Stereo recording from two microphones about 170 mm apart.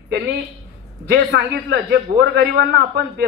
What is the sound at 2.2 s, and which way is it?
Speech, 65° right (ahead or behind).